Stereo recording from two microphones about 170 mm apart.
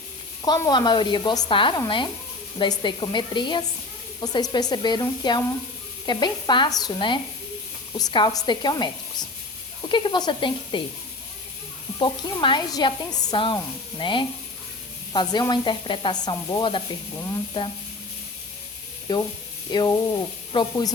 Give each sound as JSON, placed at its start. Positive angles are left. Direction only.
{"t": 0.4, "sound": "sizzle", "side_deg": 25}
{"t": 11.9, "sound": "sizzle", "side_deg": 30}
{"t": 19.1, "sound": "sizzle", "side_deg": 25}